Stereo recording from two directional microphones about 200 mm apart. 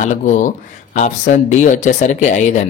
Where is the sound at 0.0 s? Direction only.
40° left (ahead or behind).